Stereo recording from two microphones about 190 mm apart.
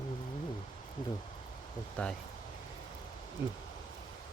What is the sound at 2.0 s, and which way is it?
Speech, 10° left (ahead or behind).